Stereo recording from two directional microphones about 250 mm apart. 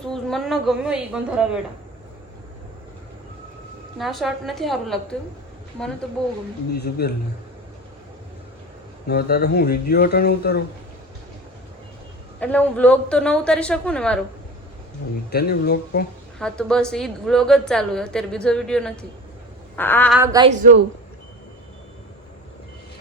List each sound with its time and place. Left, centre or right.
0.0 s a woman's voice: centre
3.9 s a woman's voice: centre
6.7 s speech: left
9.0 s speech: left
12.4 s a woman's voice: centre
15.3 s speech: left
16.4 s a woman's voice: centre
20.1 s a woman's voice: centre
20.5 s a woman's voice: right